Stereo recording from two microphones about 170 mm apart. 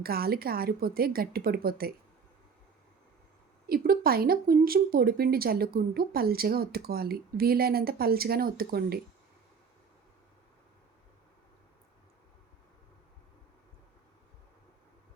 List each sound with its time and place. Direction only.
0.0 s speech: 65° right (ahead or behind)
3.7 s speech: 60° right (ahead or behind)